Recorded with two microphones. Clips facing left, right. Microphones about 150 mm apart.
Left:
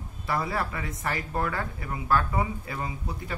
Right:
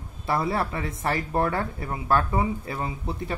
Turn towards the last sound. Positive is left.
turn(degrees=-30)  # may be behind; listen again after turning